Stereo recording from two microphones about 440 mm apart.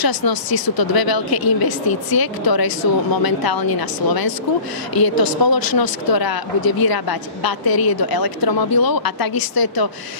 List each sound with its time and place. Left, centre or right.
0.0 s speech: left